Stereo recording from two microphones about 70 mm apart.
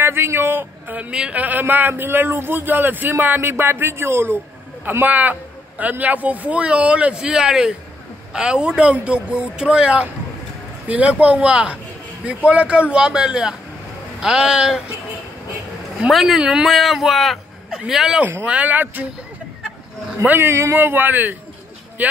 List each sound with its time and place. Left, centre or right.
0.0 s a man's voice: right
5.0 s a man's voice: right
16.1 s speech: centre
18.2 s a man's voice: right
20.2 s a man's voice: right